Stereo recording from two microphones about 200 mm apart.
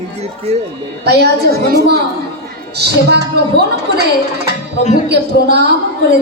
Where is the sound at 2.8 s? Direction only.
55° right (ahead or behind).